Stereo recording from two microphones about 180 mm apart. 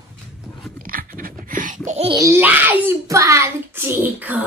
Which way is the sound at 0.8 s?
50° right (ahead or behind).